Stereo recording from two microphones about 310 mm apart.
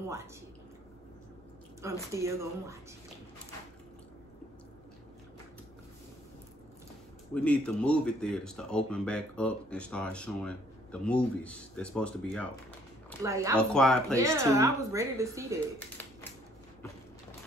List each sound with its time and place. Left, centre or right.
1.8 s a woman's voice: centre
7.3 s speech: centre
13.2 s a woman's voice: centre
13.6 s speech: centre
14.1 s a woman's voice: centre